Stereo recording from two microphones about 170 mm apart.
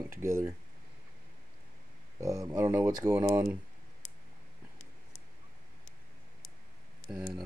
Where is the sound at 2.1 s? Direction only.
20° right (ahead or behind).